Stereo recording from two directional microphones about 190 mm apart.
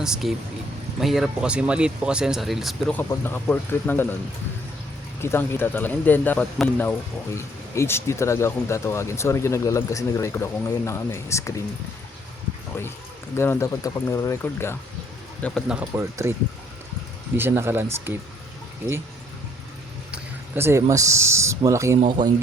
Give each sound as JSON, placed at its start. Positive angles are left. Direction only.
{"t": 0.0, "sound": "speech", "side_deg": 0}
{"t": 5.2, "sound": "speech", "side_deg": 15}
{"t": 13.3, "sound": "speech", "side_deg": 15}
{"t": 15.7, "sound": "speech", "side_deg": -5}
{"t": 17.3, "sound": "speech", "side_deg": -10}
{"t": 20.6, "sound": "speech", "side_deg": -15}